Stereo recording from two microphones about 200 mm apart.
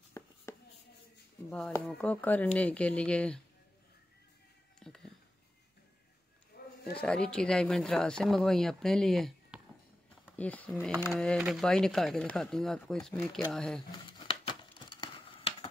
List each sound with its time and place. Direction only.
0.2 s writing: 15° left (ahead or behind)
1.9 s speech: 5° left (ahead or behind)
4.7 s whispering: 5° left (ahead or behind)
6.5 s a sound: 50° left (ahead or behind)
7.0 s speech: 5° left (ahead or behind)
14.2 s crumpling: 25° left (ahead or behind)